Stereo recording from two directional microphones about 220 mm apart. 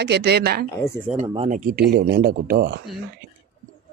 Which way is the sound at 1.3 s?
30° right (ahead or behind).